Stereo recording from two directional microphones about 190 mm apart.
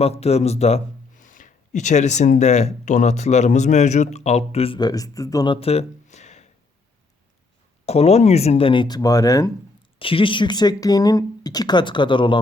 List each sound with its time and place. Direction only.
0.0 s speech: 35° left (ahead or behind)
7.9 s speech: 35° left (ahead or behind)